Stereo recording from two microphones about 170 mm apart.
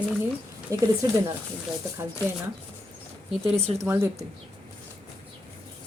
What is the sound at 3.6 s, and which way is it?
Speech, 40° right (ahead or behind).